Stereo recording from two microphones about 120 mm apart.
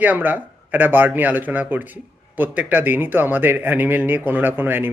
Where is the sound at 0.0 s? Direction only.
15° right (ahead or behind).